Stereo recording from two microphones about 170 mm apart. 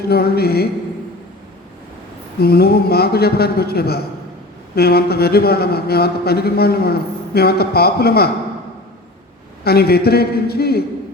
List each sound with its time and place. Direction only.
0.1 s a man's voice: 65° left (ahead or behind)
2.4 s a man's voice: 65° left (ahead or behind)
9.6 s a man's voice: 65° left (ahead or behind)